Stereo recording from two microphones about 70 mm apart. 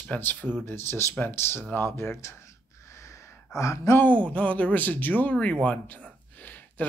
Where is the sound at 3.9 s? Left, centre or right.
Left.